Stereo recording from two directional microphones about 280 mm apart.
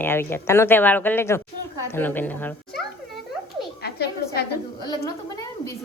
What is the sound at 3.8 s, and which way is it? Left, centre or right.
Speech, left.